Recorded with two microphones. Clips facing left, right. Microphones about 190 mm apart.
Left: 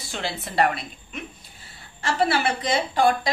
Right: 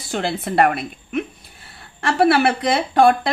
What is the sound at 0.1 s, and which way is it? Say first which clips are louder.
A woman's voice: right 8 dB; 55° right (ahead or behind).